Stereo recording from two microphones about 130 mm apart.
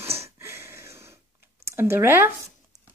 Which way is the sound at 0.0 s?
20° right (ahead or behind).